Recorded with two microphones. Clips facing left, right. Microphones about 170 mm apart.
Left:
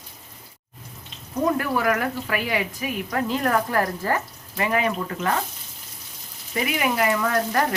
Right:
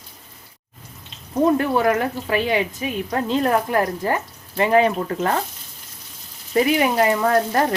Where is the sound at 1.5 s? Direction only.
25° right (ahead or behind).